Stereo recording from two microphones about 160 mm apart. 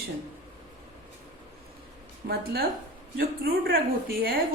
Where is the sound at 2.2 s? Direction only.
70° right (ahead or behind).